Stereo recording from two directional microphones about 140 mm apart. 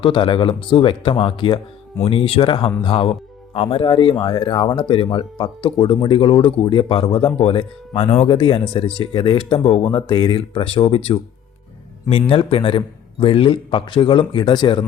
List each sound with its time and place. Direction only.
0.0 s speech: 40° left (ahead or behind)
12.3 s speech: 40° left (ahead or behind)